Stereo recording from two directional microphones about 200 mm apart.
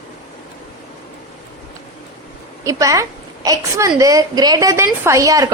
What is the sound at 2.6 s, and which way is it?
A woman's voice, 15° right (ahead or behind).